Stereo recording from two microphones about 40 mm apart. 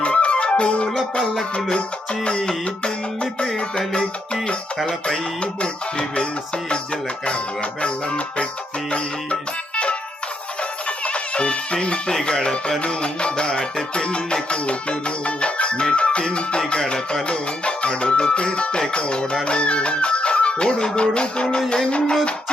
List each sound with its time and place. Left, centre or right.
0.0 s music: left
2.6 s music: left
4.9 s speech: centre
5.5 s music: left
12.2 s speech: left
12.8 s music: left